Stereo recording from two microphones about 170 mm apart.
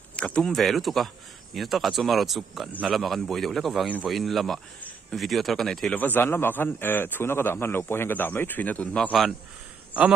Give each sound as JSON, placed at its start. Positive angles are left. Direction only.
{"t": 0.1, "sound": "a man's voice", "side_deg": 5}